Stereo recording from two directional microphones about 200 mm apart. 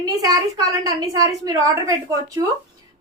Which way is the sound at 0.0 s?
20° right (ahead or behind).